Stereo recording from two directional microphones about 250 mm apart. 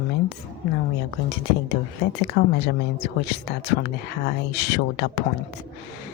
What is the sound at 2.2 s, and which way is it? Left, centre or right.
Speech, left.